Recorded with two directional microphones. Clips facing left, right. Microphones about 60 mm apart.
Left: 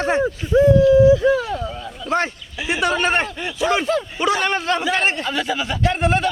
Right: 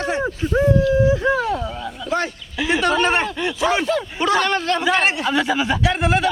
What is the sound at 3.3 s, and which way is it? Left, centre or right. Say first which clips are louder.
Speech: right 2 dB; right.